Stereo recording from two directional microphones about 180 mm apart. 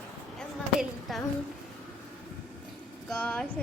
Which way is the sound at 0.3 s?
Centre (ahead or behind).